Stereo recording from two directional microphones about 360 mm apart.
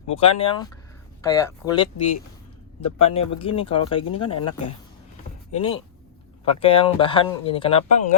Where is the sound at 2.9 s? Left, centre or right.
Centre.